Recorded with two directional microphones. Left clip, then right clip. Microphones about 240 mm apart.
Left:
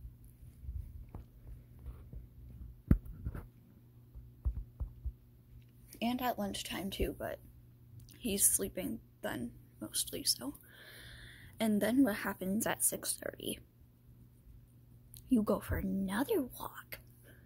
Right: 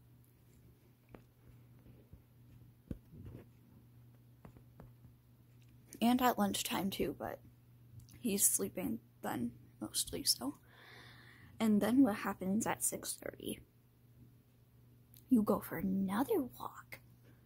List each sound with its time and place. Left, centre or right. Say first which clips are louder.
5.9 s a woman's voice: right 4 dB; right; by 13.7 s centre
15.2 s a woman's voice: left 1 dB; centre